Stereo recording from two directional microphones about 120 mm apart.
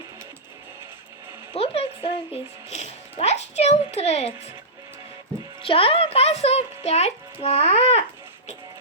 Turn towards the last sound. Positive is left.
turn(degrees=60)  # may be behind; listen again after turning